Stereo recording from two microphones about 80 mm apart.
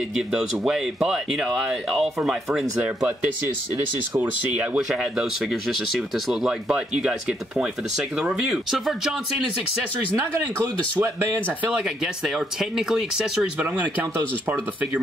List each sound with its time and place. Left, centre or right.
0.3 s speech: centre
4.7 s speech: centre
11.0 s speech: right
12.4 s speech: centre